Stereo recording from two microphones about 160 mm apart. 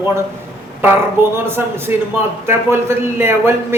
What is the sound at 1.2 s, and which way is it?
A man's voice, 15° right (ahead or behind).